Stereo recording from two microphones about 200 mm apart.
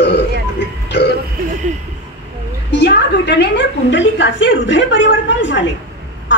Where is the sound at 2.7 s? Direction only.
60° left (ahead or behind).